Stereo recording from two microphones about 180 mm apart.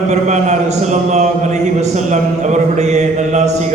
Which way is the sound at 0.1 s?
40° right (ahead or behind).